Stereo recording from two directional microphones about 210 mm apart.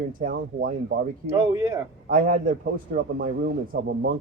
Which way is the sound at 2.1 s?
40° right (ahead or behind).